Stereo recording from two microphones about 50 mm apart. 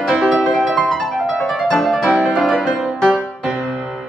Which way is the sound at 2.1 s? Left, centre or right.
Right.